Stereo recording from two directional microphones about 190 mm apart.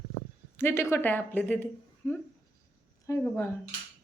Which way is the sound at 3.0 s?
15° left (ahead or behind).